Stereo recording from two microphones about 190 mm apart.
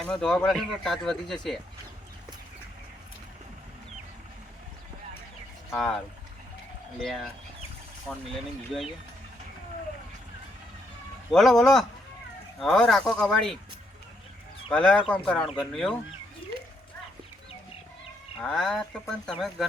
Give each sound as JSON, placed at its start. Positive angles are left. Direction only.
{"t": 0.0, "sound": "speech", "side_deg": 5}
{"t": 5.7, "sound": "speech", "side_deg": 0}
{"t": 7.0, "sound": "speech", "side_deg": 0}
{"t": 11.3, "sound": "speech", "side_deg": 0}
{"t": 14.7, "sound": "speech", "side_deg": 5}
{"t": 18.3, "sound": "speech", "side_deg": 0}